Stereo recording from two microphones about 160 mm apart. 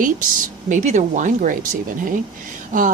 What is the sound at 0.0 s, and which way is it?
Speech, 55° right (ahead or behind).